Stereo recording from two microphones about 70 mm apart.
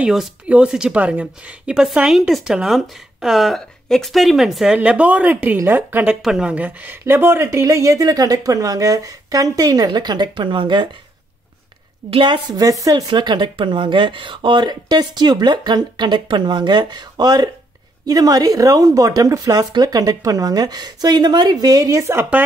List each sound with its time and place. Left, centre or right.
0.5 s speech: centre
4.7 s speech: centre
6.2 s speech: centre
6.5 s speech: right
7.1 s speech: right
8.0 s speech: right
12.3 s speech: right
18.0 s a woman's voice: right
22.0 s speech: right